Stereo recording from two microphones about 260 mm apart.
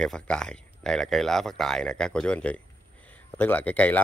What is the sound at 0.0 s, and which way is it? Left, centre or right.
Speech, centre.